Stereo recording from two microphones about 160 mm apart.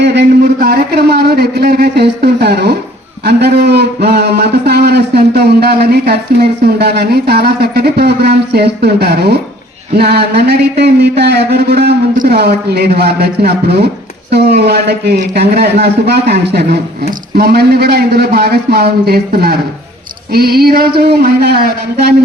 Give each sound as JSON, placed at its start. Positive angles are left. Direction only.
{"t": 0.0, "sound": "a man's voice", "side_deg": -90}
{"t": 12.1, "sound": "a man's voice", "side_deg": -70}